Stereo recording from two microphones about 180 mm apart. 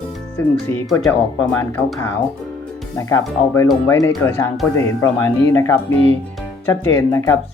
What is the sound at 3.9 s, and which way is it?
Speech, 15° left (ahead or behind).